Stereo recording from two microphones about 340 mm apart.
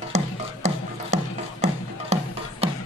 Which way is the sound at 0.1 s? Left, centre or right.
Centre.